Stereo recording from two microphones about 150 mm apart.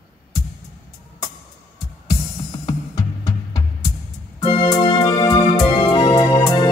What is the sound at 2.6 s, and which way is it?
Music, 30° left (ahead or behind).